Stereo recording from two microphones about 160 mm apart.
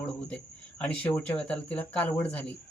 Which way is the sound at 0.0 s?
5° left (ahead or behind).